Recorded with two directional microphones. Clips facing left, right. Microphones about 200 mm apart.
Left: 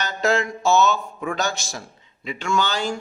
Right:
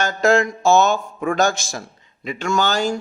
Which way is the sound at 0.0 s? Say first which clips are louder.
Right 5 dB; 45° right (ahead or behind).